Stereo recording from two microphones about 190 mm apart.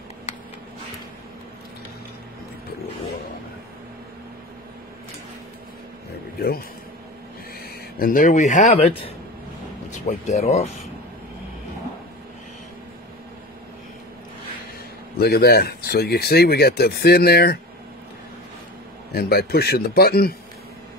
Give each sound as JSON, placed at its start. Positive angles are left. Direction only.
{"t": 8.0, "sound": "speech", "side_deg": 45}
{"t": 9.8, "sound": "speech", "side_deg": 40}
{"t": 15.1, "sound": "speech", "side_deg": 55}
{"t": 19.1, "sound": "speech", "side_deg": 55}